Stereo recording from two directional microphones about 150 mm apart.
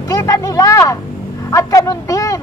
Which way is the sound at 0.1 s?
25° left (ahead or behind).